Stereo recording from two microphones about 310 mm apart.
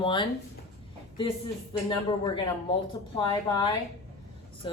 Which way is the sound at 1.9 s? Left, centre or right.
Centre.